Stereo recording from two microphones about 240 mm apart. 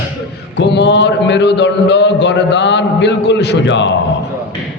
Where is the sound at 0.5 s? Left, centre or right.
Left.